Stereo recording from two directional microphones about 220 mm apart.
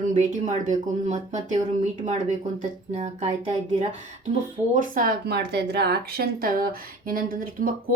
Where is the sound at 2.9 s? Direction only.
30° right (ahead or behind).